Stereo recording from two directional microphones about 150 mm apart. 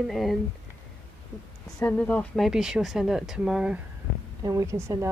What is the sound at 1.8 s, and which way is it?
A woman's voice, 10° left (ahead or behind).